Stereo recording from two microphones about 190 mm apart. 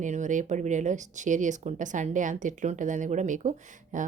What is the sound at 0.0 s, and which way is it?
Speech, 40° right (ahead or behind).